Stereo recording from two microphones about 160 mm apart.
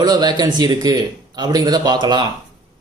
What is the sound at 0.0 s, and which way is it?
A man's voice, 25° right (ahead or behind).